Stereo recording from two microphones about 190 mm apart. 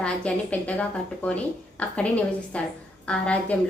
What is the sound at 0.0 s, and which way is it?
A woman's voice, 5° left (ahead or behind).